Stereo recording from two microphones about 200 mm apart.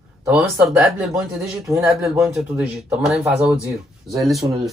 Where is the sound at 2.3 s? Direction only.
5° right (ahead or behind).